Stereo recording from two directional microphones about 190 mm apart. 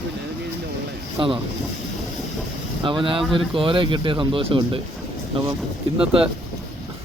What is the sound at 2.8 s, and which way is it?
Speech, 25° right (ahead or behind).